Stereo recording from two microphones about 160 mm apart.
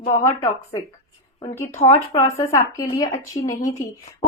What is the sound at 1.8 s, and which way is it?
Speech, 20° left (ahead or behind).